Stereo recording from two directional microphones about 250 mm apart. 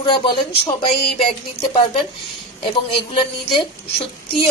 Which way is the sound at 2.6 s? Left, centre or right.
Left.